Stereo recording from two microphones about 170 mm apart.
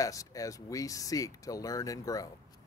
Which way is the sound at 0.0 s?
20° left (ahead or behind).